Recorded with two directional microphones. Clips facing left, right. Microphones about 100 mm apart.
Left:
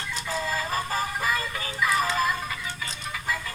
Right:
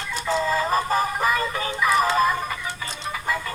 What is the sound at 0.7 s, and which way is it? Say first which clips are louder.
Music: right 6 dB; 60° right (ahead or behind).